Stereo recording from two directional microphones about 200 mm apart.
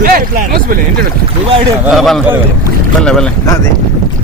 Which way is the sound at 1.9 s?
Centre (ahead or behind).